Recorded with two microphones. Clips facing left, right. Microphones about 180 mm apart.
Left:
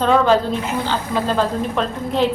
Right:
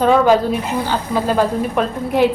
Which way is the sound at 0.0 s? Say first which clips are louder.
Right 3 dB; 10° right (ahead or behind).